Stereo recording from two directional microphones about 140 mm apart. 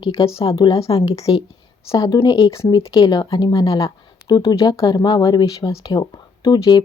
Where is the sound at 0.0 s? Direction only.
40° left (ahead or behind).